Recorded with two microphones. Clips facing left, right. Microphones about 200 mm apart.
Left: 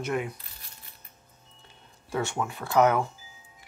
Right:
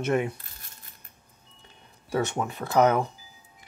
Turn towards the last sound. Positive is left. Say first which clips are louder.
# right 1 dB
turn(degrees=-20)  # may be behind; listen again after turning